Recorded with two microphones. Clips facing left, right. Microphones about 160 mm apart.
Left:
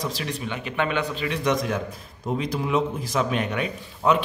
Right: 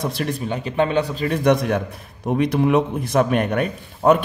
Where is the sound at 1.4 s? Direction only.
60° right (ahead or behind).